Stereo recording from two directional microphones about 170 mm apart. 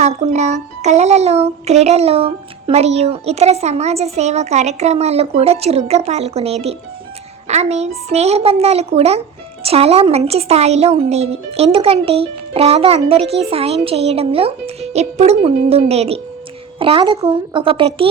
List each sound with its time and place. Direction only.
0.0 s speech: 40° right (ahead or behind)